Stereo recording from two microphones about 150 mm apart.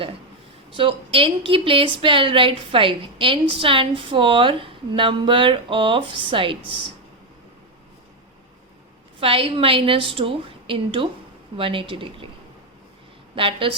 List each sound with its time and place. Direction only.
0.7 s a woman's voice: 35° right (ahead or behind)
9.2 s a woman's voice: 40° right (ahead or behind)
13.3 s a woman's voice: 35° right (ahead or behind)